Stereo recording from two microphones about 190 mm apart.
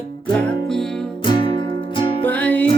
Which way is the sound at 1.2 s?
25° left (ahead or behind).